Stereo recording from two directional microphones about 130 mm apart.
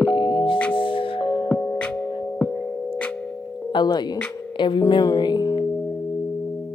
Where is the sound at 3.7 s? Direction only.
35° left (ahead or behind).